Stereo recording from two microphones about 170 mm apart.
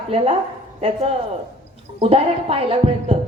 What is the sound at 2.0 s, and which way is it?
A woman's voice, 35° right (ahead or behind).